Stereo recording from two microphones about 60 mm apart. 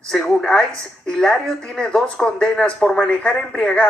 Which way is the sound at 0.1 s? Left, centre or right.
Centre.